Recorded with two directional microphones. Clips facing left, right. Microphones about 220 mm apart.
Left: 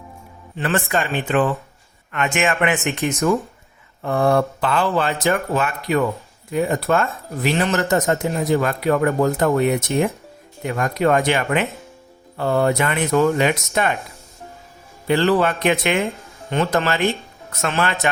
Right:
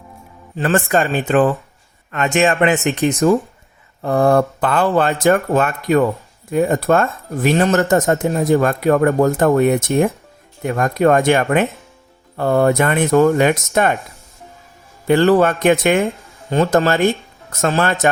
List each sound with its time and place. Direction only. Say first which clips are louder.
0.5 s speech: right 5 dB; 40° right (ahead or behind)
4.3 s speech: right 1 dB; 50° right (ahead or behind)
15.0 s speech: right 5 dB; 50° right (ahead or behind)
17.6 s speech: right 5 dB; 35° right (ahead or behind)